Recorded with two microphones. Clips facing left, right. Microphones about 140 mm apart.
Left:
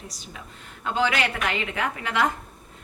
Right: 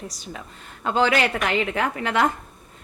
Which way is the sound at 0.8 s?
40° right (ahead or behind).